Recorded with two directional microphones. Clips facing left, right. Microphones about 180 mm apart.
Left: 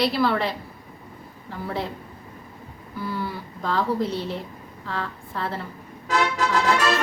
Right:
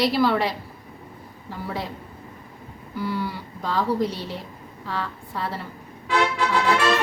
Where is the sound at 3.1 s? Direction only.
10° right (ahead or behind).